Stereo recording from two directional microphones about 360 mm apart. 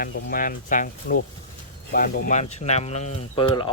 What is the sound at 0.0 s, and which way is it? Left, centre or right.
Speech, left.